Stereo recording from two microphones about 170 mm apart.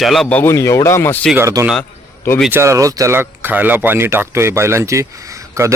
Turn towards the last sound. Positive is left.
turn(degrees=-15)  # may be behind; listen again after turning